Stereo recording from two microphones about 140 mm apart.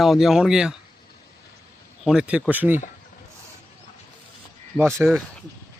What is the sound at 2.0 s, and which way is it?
Speech, 5° right (ahead or behind).